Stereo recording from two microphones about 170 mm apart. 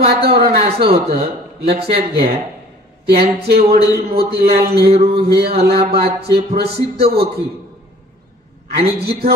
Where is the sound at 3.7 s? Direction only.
35° right (ahead or behind).